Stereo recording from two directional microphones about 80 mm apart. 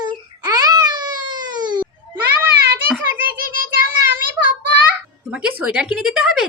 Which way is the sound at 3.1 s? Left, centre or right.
Right.